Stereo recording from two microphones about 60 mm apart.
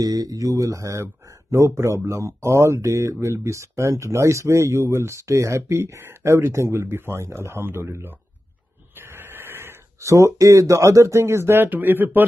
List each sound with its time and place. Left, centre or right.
0.0 s speech: right
1.0 s speech: right
5.9 s speech: right
8.9 s a sound: right
9.9 s speech: right